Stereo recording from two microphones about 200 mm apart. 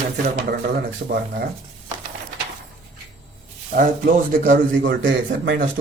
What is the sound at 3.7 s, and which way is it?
A man's voice, 45° right (ahead or behind).